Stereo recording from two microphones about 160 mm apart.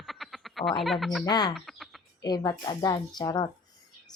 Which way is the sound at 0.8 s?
Centre (ahead or behind).